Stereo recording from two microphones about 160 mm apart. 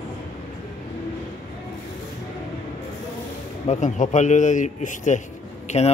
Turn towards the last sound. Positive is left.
turn(degrees=45)  # may be behind; listen again after turning